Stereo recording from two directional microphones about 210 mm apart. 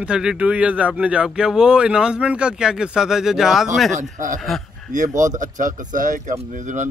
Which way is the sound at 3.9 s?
40° right (ahead or behind).